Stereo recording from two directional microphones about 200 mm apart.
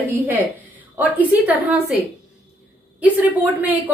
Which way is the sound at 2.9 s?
10° right (ahead or behind).